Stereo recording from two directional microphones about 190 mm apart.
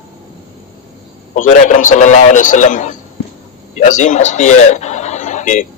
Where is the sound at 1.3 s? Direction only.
40° left (ahead or behind).